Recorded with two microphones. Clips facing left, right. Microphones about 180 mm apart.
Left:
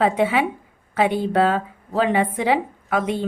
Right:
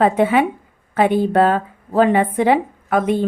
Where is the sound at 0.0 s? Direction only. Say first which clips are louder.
Right 4 dB; 50° right (ahead or behind).